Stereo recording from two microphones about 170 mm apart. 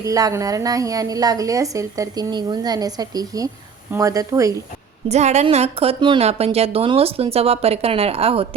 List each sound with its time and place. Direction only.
0.0 s a woman's voice: 20° right (ahead or behind)
5.0 s a woman's voice: 40° right (ahead or behind)